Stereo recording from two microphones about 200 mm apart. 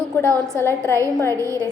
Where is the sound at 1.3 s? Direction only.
15° right (ahead or behind).